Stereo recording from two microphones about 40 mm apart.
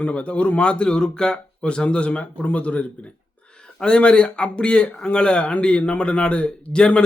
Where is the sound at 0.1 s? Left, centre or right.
Left.